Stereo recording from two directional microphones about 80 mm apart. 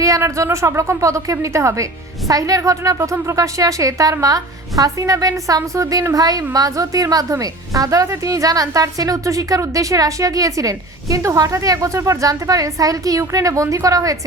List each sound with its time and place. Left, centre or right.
0.0 s speech: right